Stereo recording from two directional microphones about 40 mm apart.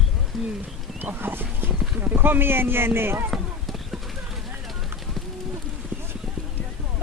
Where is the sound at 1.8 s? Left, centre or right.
Right.